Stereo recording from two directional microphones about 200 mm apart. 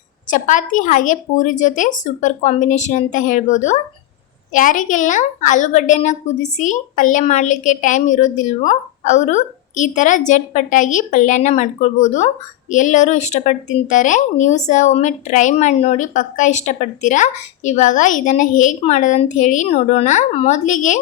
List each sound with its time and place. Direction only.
0.3 s speech: 40° left (ahead or behind)